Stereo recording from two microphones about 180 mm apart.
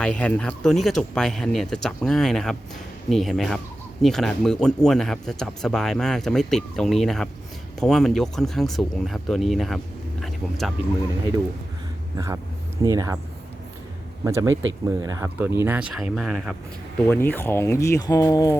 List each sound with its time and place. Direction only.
0.0 s speech: 5° left (ahead or behind)
12.1 s speech: 20° right (ahead or behind)
14.3 s speech: 15° right (ahead or behind)
14.5 s speech: 90° right
14.8 s speech: 20° right (ahead or behind); by 16.6 s centre (ahead or behind)
17.1 s speech: 10° left (ahead or behind)